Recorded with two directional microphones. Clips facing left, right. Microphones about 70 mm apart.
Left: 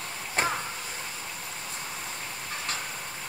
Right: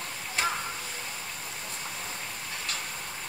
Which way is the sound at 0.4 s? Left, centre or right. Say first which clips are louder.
Left 2 dB; left.